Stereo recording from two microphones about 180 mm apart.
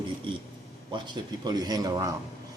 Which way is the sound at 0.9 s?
25° right (ahead or behind).